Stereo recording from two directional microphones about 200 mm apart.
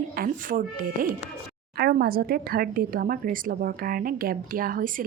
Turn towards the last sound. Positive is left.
turn(degrees=-45)  # may be behind; listen again after turning